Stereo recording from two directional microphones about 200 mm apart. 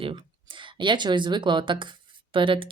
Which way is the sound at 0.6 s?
25° right (ahead or behind).